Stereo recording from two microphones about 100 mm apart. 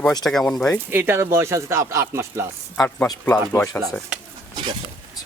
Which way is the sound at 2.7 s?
20° left (ahead or behind).